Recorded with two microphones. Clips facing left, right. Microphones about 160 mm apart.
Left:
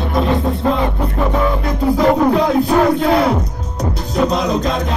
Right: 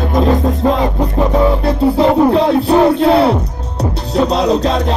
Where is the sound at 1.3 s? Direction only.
30° right (ahead or behind).